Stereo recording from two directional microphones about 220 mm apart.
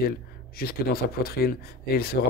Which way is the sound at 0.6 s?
45° left (ahead or behind).